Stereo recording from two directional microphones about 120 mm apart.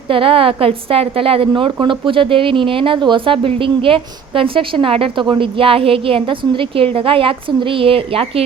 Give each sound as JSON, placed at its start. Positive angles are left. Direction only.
{"t": 0.1, "sound": "a woman's voice", "side_deg": -50}